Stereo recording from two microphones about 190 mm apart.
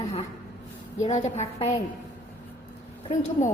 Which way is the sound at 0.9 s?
35° left (ahead or behind).